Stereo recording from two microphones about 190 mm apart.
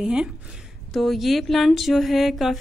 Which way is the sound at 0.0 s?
5° right (ahead or behind).